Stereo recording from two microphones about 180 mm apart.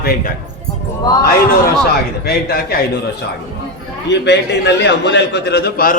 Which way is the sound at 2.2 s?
65° left (ahead or behind).